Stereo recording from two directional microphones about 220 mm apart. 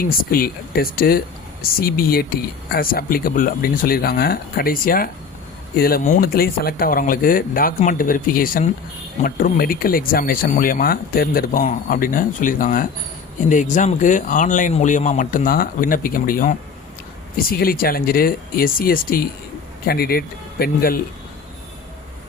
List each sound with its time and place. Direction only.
0.0 s speech: 40° left (ahead or behind)